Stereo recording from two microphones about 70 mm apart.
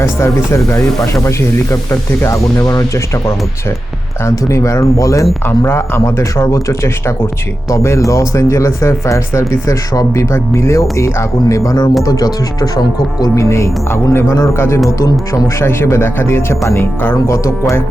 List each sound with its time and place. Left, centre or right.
0.0 s speech: left
2.6 s speech: left
4.3 s speech: left
5.5 s speech: left
12.0 s speech: left
13.3 s speech: left
15.3 s speech: left